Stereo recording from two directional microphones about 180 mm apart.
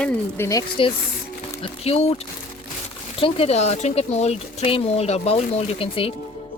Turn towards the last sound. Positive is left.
turn(degrees=30)  # may be behind; listen again after turning